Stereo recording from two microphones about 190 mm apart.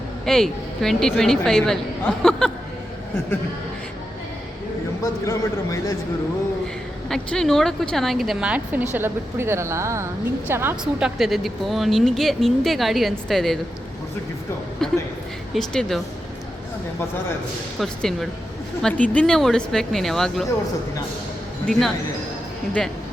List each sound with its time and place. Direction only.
0.3 s speech: centre (ahead or behind)
5.2 s a man's voice: 15° left (ahead or behind)
7.1 s a woman's voice: 5° left (ahead or behind)
11.2 s speech: centre (ahead or behind)
14.8 s speech: centre (ahead or behind)
17.7 s speech: centre (ahead or behind)
21.7 s speech: centre (ahead or behind)